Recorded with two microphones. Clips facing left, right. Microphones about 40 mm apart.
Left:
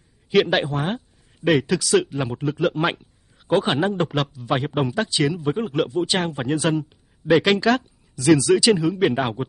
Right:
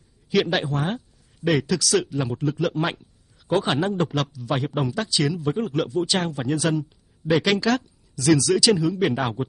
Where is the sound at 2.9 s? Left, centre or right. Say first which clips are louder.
Left 3 dB; left.